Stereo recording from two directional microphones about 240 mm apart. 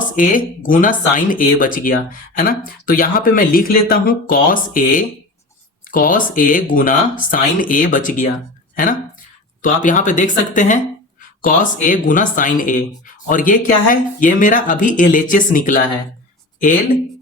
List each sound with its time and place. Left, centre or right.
0.2 s speech: left